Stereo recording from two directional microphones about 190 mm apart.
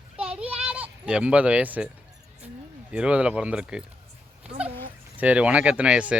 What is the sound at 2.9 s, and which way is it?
Speech, 5° right (ahead or behind).